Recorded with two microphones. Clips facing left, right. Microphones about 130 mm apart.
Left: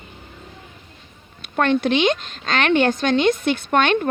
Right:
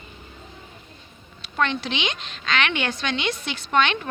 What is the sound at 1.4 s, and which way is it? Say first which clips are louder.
A woman's voice: left 6 dB; 50° left (ahead or behind).